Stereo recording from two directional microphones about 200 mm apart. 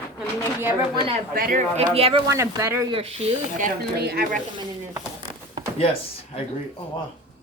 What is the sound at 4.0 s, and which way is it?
Speech, 50° right (ahead or behind).